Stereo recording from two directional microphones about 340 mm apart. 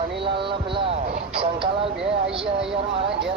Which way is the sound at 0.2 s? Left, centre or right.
Centre.